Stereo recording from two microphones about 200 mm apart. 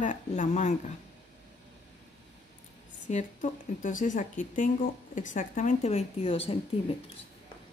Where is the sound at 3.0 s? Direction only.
40° left (ahead or behind).